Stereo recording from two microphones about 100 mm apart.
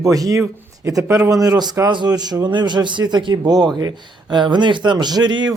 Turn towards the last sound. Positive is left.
turn(degrees=-45)  # may be behind; listen again after turning